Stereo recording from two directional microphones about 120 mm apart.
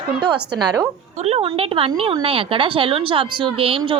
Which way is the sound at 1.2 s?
55° right (ahead or behind).